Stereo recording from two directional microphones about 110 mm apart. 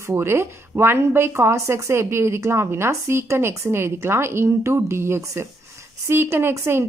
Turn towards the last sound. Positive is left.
turn(degrees=-20)  # may be behind; listen again after turning